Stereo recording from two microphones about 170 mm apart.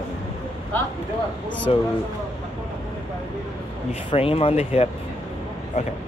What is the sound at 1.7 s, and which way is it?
Speech, 35° left (ahead or behind).